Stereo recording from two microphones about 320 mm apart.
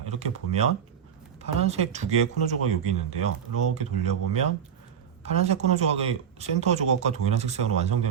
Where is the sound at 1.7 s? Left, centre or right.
Right.